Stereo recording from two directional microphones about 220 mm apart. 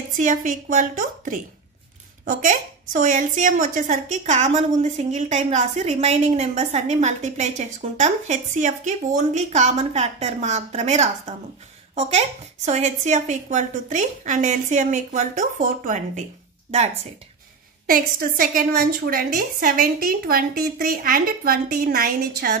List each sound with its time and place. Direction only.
0.1 s speech: 35° right (ahead or behind)
17.8 s speech: 40° right (ahead or behind)